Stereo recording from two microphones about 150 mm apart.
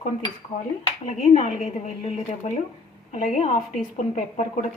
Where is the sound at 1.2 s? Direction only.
45° left (ahead or behind).